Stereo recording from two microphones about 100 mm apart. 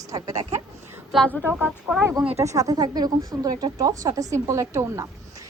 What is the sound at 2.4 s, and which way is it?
Speech, 35° right (ahead or behind).